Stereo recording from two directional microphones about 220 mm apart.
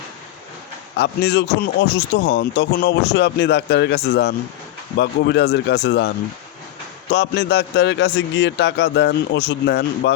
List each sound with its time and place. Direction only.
0.9 s a man's voice: 50° left (ahead or behind)